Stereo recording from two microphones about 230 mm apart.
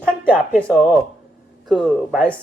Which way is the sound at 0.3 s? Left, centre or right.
Centre.